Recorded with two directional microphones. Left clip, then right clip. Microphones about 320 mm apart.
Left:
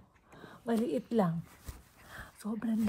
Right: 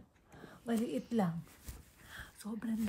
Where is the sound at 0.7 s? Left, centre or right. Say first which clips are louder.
Left 5 dB; centre.